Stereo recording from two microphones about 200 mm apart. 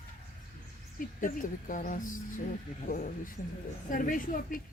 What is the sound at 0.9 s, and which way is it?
Speech, 40° left (ahead or behind).